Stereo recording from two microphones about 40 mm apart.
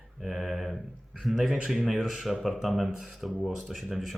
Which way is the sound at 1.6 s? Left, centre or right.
Centre.